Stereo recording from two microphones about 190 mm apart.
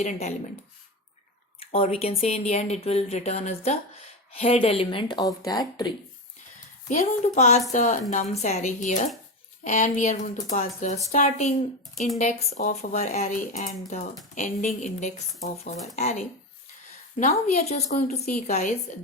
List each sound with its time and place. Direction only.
0.0 s speech: 35° left (ahead or behind)
1.5 s speech: 30° left (ahead or behind)
6.9 s speech: 40° left (ahead or behind)
17.4 s speech: 35° left (ahead or behind)